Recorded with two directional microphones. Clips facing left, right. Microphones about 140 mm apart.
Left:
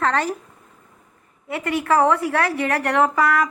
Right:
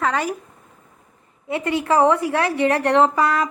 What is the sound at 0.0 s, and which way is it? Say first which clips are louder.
Speech: left 1 dB; 10° right (ahead or behind).